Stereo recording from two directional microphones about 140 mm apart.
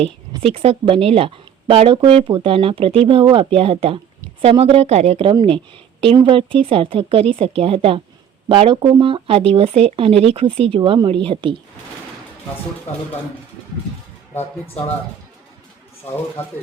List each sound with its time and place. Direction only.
0.0 s speech: 45° right (ahead or behind)
5.3 s speech: 35° right (ahead or behind)
16.0 s speech: 50° left (ahead or behind)